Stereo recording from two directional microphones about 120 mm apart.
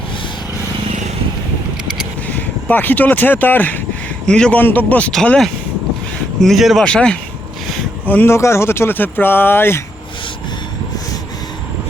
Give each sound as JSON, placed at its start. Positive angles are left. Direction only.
{"t": 2.2, "sound": "a man's voice", "side_deg": 15}
{"t": 8.1, "sound": "speech", "side_deg": 20}